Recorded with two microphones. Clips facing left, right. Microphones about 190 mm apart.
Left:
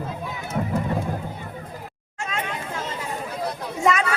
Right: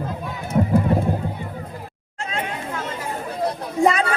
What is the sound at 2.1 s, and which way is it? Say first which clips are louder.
Chatter: right 2 dB; 30° right (ahead or behind).